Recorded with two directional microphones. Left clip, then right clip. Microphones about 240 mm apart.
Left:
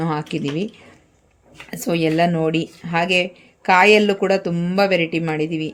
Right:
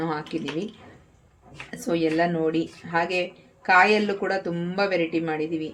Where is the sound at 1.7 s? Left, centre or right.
Left.